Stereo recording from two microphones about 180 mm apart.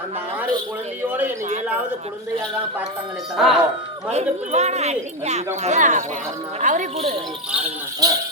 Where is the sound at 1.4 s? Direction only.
40° right (ahead or behind).